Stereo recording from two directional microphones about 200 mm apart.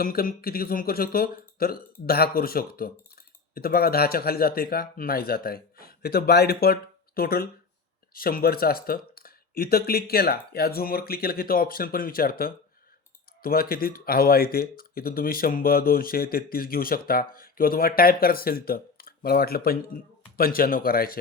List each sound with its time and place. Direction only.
0.0 s speech: 45° left (ahead or behind)